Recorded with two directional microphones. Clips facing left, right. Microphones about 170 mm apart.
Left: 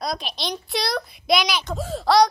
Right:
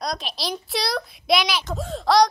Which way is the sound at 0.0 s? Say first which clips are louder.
Even; centre (ahead or behind).